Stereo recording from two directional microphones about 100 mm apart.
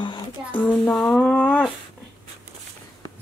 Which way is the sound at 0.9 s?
5° left (ahead or behind).